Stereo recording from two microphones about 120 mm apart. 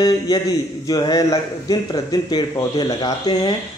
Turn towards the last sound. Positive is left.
turn(degrees=40)  # may be behind; listen again after turning